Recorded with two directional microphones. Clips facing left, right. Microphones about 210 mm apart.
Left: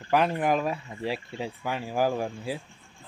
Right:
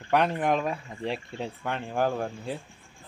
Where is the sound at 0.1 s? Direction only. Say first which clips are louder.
Even; centre (ahead or behind).